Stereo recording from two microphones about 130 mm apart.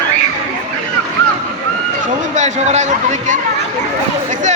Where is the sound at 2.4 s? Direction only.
65° right (ahead or behind).